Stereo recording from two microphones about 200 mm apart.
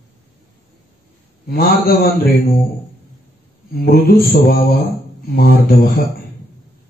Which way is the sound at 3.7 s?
50° left (ahead or behind).